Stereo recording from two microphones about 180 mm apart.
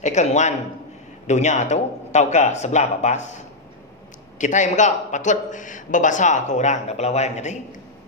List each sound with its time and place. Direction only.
0.0 s speech: 40° left (ahead or behind)
4.4 s a man's voice: 45° left (ahead or behind)